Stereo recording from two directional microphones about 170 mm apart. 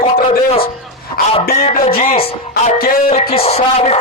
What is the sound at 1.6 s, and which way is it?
Speech, 35° left (ahead or behind).